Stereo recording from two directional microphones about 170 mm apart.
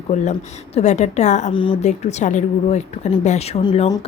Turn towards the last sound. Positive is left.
turn(degrees=30)  # may be behind; listen again after turning